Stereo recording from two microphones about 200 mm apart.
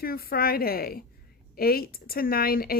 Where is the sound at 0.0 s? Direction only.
45° left (ahead or behind).